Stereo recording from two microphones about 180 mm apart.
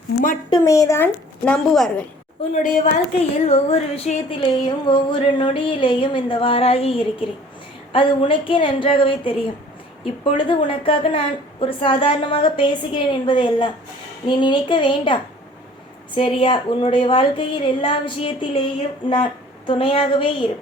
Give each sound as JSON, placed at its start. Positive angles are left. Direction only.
{"t": 0.5, "sound": "a woman's voice", "side_deg": 20}
{"t": 2.5, "sound": "speech", "side_deg": 45}